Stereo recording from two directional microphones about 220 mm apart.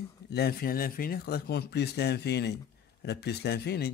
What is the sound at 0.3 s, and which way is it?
Speech, 45° left (ahead or behind).